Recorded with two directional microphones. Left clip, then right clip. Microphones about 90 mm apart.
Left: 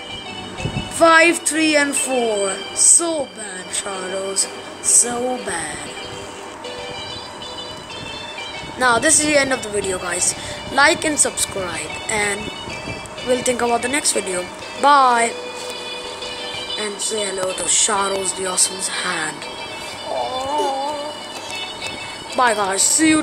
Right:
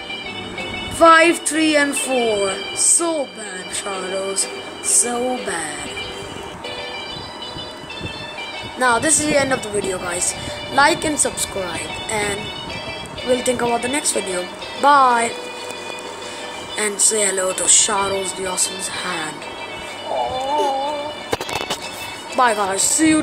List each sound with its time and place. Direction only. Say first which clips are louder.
0.9 s a woman's voice: right 1 dB; centre (ahead or behind)
8.7 s a woman's voice: left 1 dB; 5° left (ahead or behind)
17.6 s a woman's voice: right 2 dB; centre (ahead or behind)
17.9 s a woman's voice: even; 15° left (ahead or behind)
20.2 s music: right 1 dB; 15° right (ahead or behind)
22.4 s a woman's voice: even; 10° left (ahead or behind)